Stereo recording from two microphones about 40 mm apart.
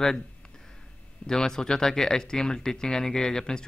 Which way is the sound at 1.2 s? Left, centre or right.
Centre.